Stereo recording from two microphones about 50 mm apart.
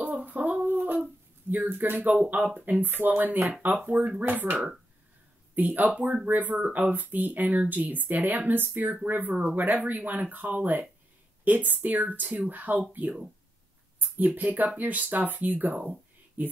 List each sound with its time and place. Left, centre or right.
0.0 s a sound: right
1.5 s speech: right
9.3 s speech: centre
9.6 s speech: right
13.9 s speech: right